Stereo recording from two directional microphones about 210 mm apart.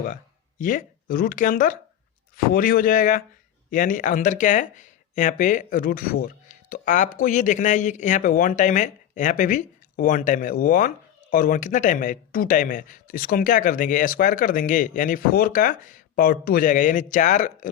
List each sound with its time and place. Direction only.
0.6 s speech: 40° left (ahead or behind)